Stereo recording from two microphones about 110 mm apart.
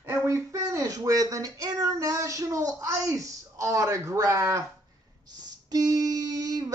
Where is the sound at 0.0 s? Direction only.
20° right (ahead or behind).